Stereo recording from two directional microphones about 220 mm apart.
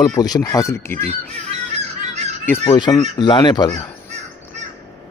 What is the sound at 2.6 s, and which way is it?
A man's voice, 20° left (ahead or behind).